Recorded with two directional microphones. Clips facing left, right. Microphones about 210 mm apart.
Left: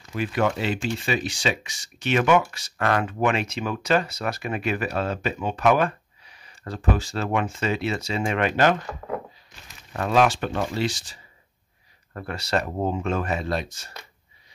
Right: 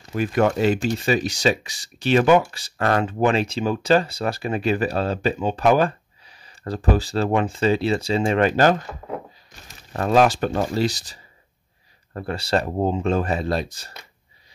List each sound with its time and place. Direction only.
0.1 s speech: 45° right (ahead or behind)